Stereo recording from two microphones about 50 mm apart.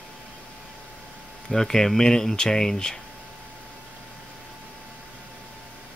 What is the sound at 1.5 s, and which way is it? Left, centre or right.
Speech, centre.